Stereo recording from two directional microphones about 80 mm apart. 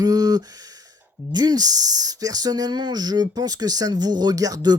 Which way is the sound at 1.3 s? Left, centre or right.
Right.